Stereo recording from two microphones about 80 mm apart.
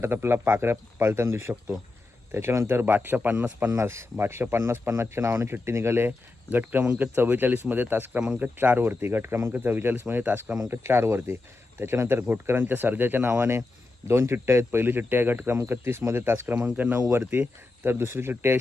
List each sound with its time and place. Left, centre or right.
0.0 s speech: right